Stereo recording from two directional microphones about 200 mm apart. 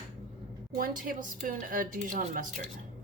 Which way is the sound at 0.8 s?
45° right (ahead or behind).